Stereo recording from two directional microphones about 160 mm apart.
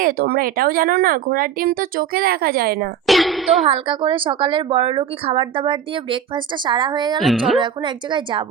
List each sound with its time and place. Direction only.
0.0 s speech: 65° right (ahead or behind)
3.1 s speech: centre (ahead or behind)
3.7 s a woman's voice: 30° right (ahead or behind)
7.2 s speech: centre (ahead or behind)
7.6 s speech: 30° right (ahead or behind)